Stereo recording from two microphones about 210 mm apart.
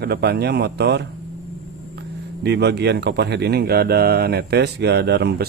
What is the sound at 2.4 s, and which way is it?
Speech, 55° right (ahead or behind).